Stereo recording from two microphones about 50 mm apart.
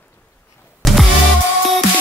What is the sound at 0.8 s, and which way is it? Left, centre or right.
Music, centre.